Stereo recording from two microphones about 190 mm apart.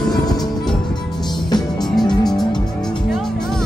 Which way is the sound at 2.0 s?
Centre (ahead or behind).